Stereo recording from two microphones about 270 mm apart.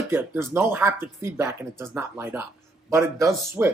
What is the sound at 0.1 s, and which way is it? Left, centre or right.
Speech, centre.